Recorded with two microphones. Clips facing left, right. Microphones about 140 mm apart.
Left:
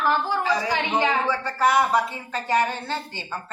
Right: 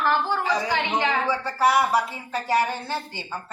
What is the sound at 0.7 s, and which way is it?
Speech, 10° left (ahead or behind).